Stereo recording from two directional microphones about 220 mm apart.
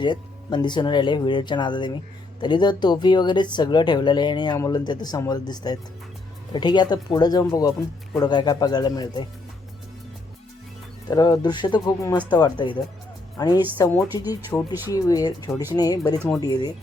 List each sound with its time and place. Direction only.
0.0 s speech: 20° left (ahead or behind)
11.1 s speech: 15° left (ahead or behind)